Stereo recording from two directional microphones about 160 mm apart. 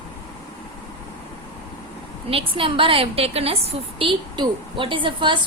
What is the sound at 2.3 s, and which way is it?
A woman's voice, 35° right (ahead or behind).